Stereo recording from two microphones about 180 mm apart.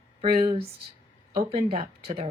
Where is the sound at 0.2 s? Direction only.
30° right (ahead or behind).